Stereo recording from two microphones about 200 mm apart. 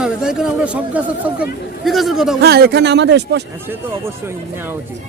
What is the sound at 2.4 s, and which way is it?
Speech, 55° right (ahead or behind).